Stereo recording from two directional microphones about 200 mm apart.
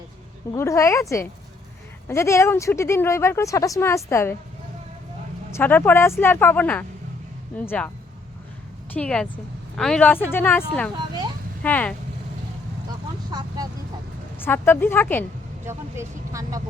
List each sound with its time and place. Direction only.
0.5 s speech: 15° left (ahead or behind)
5.5 s speech: 10° left (ahead or behind)
8.9 s speech: 5° left (ahead or behind)
10.9 s speech: 20° right (ahead or behind)
11.6 s speech: 10° left (ahead or behind)
14.3 s speech: 10° left (ahead or behind)
15.6 s speech: 15° right (ahead or behind)